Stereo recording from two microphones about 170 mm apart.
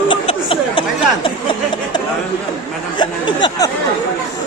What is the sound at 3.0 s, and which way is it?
Speech, 25° left (ahead or behind).